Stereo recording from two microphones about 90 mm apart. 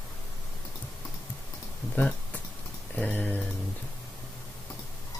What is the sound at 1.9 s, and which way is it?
Speech, 15° left (ahead or behind).